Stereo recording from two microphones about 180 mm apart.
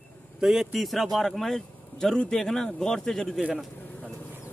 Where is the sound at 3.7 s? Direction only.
10° left (ahead or behind).